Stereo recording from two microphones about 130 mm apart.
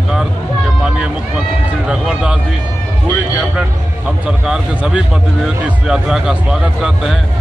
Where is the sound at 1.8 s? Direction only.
5° right (ahead or behind).